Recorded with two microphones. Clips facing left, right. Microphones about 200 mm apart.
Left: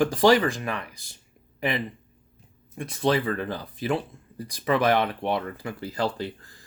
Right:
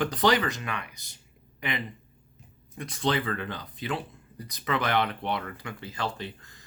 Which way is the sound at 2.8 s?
25° left (ahead or behind).